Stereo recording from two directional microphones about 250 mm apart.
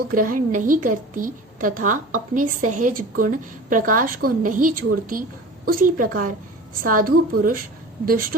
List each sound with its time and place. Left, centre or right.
0.1 s a woman's voice: right